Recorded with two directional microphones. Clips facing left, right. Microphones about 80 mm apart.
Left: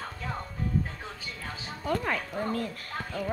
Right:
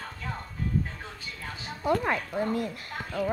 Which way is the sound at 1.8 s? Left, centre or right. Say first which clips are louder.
Right 3 dB; centre.